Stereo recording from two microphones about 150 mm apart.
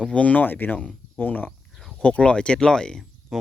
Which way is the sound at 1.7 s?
Centre (ahead or behind).